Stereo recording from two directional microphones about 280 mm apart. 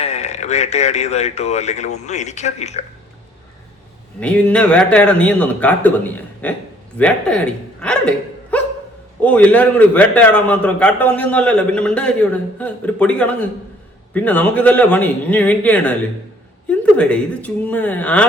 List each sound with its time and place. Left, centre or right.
0.0 s speech: left
4.2 s a man's voice: centre